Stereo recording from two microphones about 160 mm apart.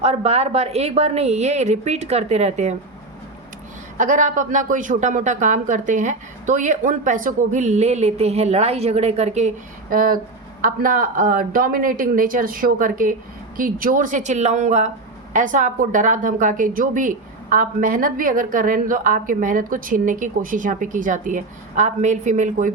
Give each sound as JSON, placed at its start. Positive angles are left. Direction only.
{"t": 0.0, "sound": "speech", "side_deg": -40}
{"t": 3.9, "sound": "speech", "side_deg": -50}
{"t": 9.9, "sound": "a woman's voice", "side_deg": -60}